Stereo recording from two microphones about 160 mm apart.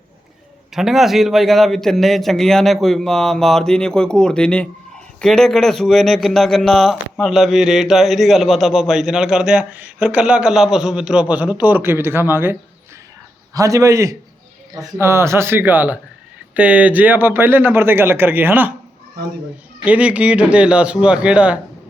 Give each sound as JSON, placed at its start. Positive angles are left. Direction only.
{"t": 0.7, "sound": "a man's voice", "side_deg": 0}
{"t": 19.8, "sound": "speech", "side_deg": -5}